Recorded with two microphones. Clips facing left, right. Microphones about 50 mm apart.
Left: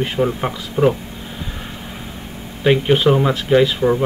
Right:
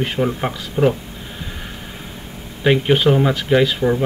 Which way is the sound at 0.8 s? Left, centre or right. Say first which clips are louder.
Left 1 dB; left.